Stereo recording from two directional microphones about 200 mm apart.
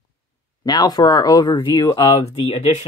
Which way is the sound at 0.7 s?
20° left (ahead or behind).